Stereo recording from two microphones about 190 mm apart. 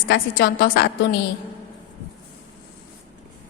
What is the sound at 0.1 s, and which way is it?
A woman's voice, 65° left (ahead or behind).